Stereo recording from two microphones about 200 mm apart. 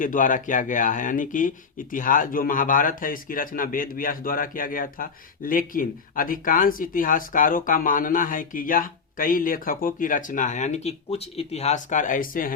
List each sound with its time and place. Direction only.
0.0 s speech: 40° left (ahead or behind)